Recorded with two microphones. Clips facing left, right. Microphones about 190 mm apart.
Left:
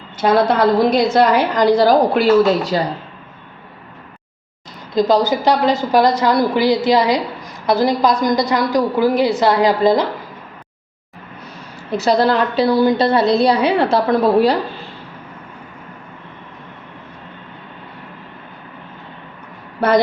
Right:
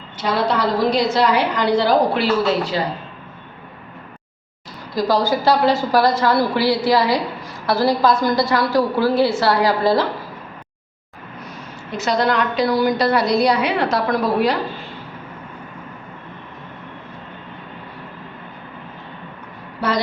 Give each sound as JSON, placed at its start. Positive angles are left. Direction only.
{"t": 0.2, "sound": "a woman's voice", "side_deg": 50}
{"t": 4.9, "sound": "a woman's voice", "side_deg": 20}
{"t": 11.9, "sound": "a woman's voice", "side_deg": 35}